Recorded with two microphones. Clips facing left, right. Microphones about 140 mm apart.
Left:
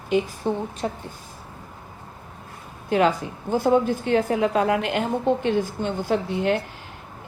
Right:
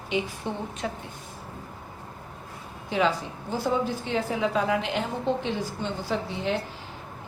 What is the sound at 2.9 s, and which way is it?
A woman's voice, 55° left (ahead or behind).